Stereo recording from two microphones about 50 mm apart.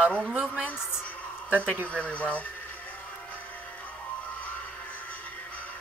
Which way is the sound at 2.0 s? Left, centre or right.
Left.